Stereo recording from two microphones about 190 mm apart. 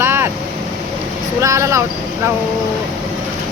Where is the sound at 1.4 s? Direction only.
15° right (ahead or behind).